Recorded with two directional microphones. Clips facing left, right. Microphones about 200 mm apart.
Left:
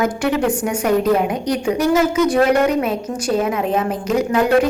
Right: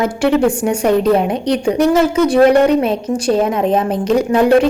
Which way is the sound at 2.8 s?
30° right (ahead or behind).